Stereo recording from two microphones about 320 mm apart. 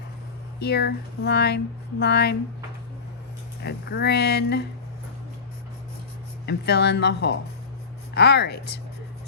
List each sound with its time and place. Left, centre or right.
0.6 s speech: left
3.6 s speech: left
6.4 s speech: left